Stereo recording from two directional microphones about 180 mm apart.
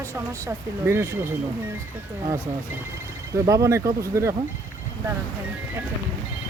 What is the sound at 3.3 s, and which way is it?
Speech, 20° right (ahead or behind).